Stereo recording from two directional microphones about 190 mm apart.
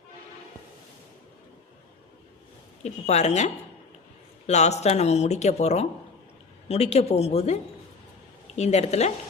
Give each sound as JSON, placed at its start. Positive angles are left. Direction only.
{"t": 2.8, "sound": "speech", "side_deg": 35}